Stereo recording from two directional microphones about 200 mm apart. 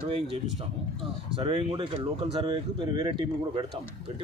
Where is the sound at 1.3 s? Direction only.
25° right (ahead or behind).